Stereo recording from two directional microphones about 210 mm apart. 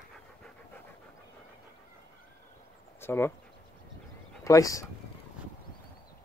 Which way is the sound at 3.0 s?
10° left (ahead or behind).